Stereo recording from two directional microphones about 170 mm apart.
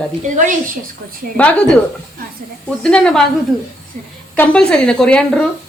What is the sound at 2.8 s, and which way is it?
Speech, 5° left (ahead or behind).